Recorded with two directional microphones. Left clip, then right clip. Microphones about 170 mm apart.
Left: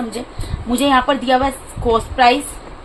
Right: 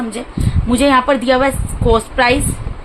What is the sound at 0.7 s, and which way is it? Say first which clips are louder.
A woman's voice: right 3 dB; 35° right (ahead or behind).